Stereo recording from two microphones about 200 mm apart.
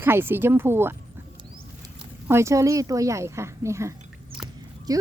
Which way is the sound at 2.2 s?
15° right (ahead or behind).